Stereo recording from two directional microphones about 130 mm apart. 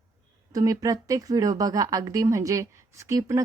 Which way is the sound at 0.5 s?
25° right (ahead or behind).